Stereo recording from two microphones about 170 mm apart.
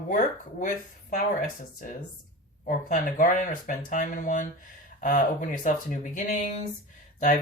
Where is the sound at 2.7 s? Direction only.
50° left (ahead or behind).